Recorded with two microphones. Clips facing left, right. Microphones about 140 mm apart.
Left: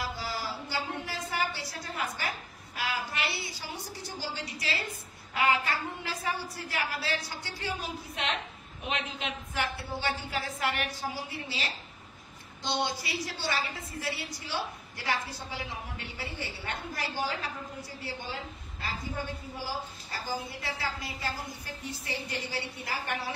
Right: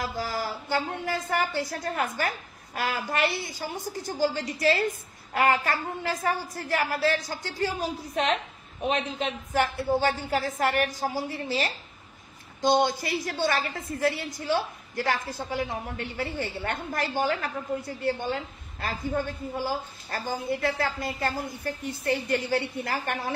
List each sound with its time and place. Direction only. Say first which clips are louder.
0.0 s a woman's voice: right 5 dB; 45° right (ahead or behind)